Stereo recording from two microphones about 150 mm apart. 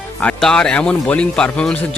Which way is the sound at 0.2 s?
5° left (ahead or behind).